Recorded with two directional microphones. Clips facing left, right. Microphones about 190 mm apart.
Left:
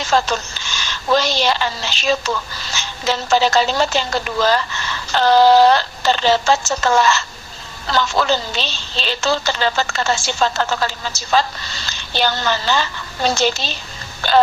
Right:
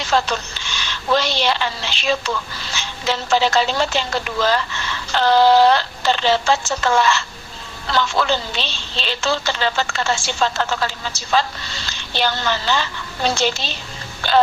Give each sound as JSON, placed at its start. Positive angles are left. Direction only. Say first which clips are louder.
{"t": 0.0, "sound": "a woman's voice", "louder": "left 2 dB", "side_deg": 45}